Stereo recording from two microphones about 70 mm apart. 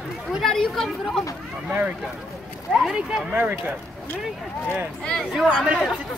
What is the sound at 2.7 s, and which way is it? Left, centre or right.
Speech, centre.